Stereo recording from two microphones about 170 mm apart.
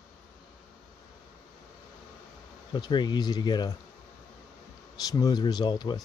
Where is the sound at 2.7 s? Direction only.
25° left (ahead or behind).